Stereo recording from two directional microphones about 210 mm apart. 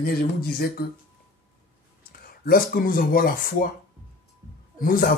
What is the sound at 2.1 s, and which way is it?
Speech, 45° left (ahead or behind).